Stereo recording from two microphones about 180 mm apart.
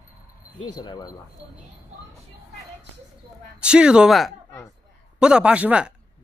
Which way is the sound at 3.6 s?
5° right (ahead or behind).